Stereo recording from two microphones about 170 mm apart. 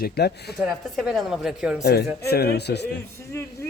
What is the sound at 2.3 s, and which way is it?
Speech, 70° left (ahead or behind).